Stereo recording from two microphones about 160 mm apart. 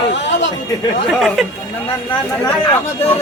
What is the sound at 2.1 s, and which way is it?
Speech, 25° left (ahead or behind).